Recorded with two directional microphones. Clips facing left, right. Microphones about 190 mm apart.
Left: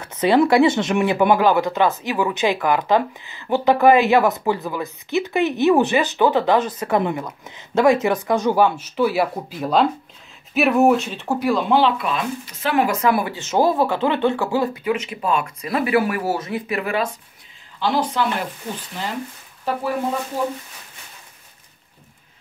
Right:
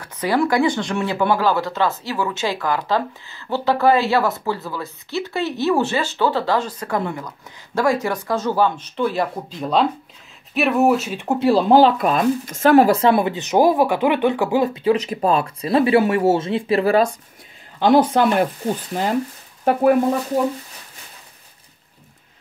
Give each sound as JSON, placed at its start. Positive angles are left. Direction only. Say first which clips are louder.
{"t": 0.0, "sound": "speech", "louder": "left 4 dB", "side_deg": 25}
{"t": 11.2, "sound": "speech", "louder": "right 5 dB", "side_deg": -30}
{"t": 17.7, "sound": "speech", "louder": "right 6 dB", "side_deg": -50}